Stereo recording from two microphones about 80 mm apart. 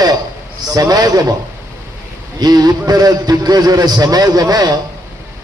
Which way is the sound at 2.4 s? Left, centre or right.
Right.